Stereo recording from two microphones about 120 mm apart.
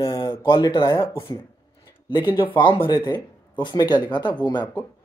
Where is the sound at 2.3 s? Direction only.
40° left (ahead or behind).